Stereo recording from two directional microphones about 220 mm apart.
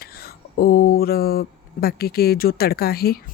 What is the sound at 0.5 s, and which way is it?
Speech, 45° left (ahead or behind).